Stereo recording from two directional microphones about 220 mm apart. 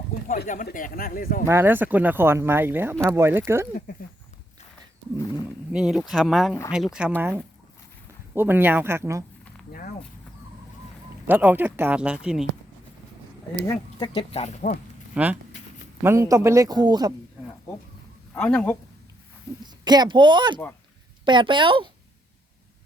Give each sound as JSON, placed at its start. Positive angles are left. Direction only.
{"t": 0.3, "sound": "speech", "side_deg": 35}
{"t": 1.5, "sound": "speech", "side_deg": -10}
{"t": 5.5, "sound": "speech", "side_deg": -5}
{"t": 11.3, "sound": "speech", "side_deg": -10}
{"t": 14.0, "sound": "speech", "side_deg": 25}
{"t": 15.1, "sound": "speech", "side_deg": -5}
{"t": 18.3, "sound": "speech", "side_deg": 5}
{"t": 19.8, "sound": "speech", "side_deg": -20}